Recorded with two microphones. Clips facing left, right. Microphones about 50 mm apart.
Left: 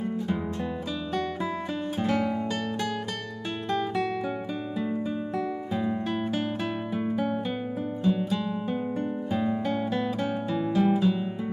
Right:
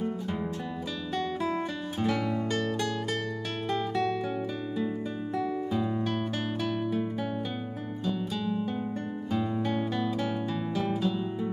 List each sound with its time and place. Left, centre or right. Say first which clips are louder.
5.7 s music: left 1 dB; centre
10.5 s music: left 6 dB; centre